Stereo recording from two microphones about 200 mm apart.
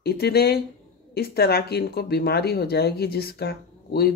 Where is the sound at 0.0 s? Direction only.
50° left (ahead or behind).